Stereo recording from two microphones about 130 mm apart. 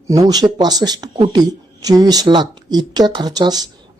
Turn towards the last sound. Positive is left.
turn(degrees=-30)  # may be behind; listen again after turning